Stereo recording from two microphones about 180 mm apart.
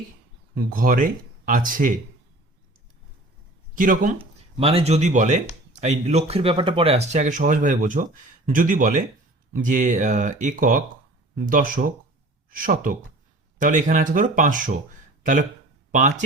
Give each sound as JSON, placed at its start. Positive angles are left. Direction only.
{"t": 0.5, "sound": "speech", "side_deg": -55}
{"t": 3.8, "sound": "speech", "side_deg": -50}
{"t": 4.2, "sound": "speech", "side_deg": -30}